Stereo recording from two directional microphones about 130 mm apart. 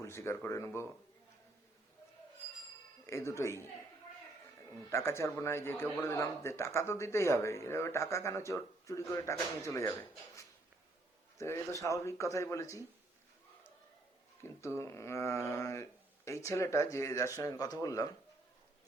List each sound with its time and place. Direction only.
0.0 s speech: 20° left (ahead or behind)
3.1 s speech: 20° left (ahead or behind)
4.9 s speech: 20° left (ahead or behind)
11.3 s speech: 20° left (ahead or behind)
14.4 s speech: 20° left (ahead or behind)